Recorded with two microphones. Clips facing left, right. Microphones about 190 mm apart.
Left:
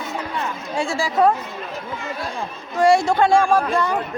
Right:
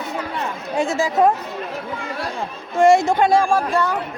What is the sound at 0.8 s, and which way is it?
Speech, 20° right (ahead or behind).